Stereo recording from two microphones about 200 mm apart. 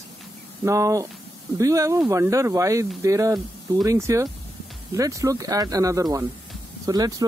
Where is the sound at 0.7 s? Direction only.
15° right (ahead or behind).